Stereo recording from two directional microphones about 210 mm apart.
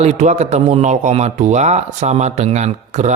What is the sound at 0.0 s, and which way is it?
Speech, 35° right (ahead or behind).